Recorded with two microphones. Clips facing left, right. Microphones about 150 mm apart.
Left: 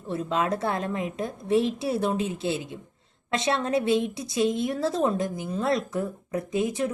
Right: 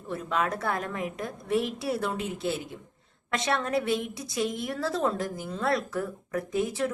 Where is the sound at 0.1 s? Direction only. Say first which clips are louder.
Left 3 dB; 25° left (ahead or behind).